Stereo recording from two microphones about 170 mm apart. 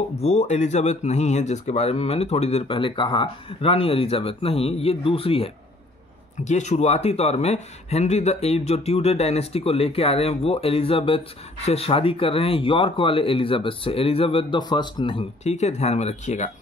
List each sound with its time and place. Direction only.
0.2 s speech: 40° left (ahead or behind)